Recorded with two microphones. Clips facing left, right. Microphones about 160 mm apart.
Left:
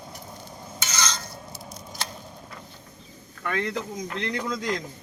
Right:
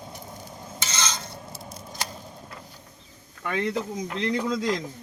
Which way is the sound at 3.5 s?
30° right (ahead or behind).